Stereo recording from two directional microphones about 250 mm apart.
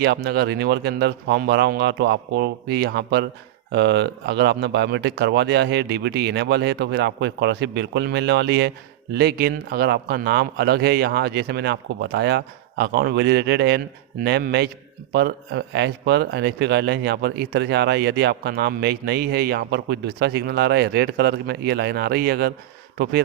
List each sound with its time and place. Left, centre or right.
0.0 s speech: right